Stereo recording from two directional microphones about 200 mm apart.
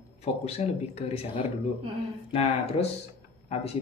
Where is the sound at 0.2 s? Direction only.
30° left (ahead or behind).